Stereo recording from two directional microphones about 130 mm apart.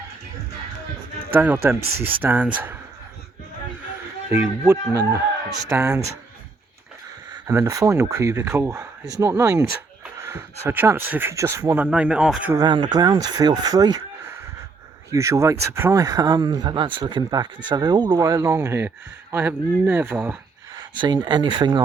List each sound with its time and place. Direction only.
1.3 s speech: 15° right (ahead or behind)
4.3 s speech: 15° right (ahead or behind)
7.4 s speech: 20° right (ahead or behind)
11.9 s speech: 10° right (ahead or behind)
12.5 s speech: 35° right (ahead or behind)
15.1 s speech: 25° right (ahead or behind)
20.7 s speech: 30° right (ahead or behind)